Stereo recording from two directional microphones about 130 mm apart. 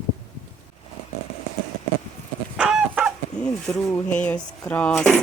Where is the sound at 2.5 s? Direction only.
5° right (ahead or behind).